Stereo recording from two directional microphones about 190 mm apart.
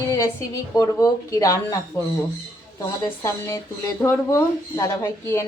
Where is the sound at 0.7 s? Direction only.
15° left (ahead or behind).